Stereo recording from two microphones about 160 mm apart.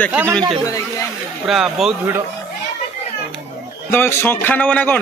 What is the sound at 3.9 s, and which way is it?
A man's voice, 15° left (ahead or behind).